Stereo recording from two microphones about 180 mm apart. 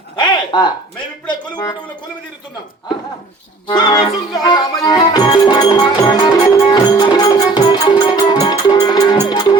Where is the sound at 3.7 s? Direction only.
25° left (ahead or behind).